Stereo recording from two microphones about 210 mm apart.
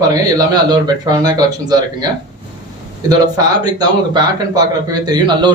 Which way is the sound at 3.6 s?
20° right (ahead or behind).